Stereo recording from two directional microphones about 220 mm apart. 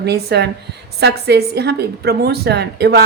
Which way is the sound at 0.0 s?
50° right (ahead or behind).